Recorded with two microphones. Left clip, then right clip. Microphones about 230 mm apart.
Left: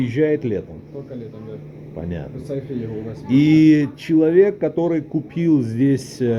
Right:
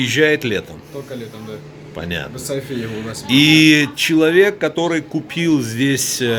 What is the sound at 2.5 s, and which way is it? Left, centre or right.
Speech, right.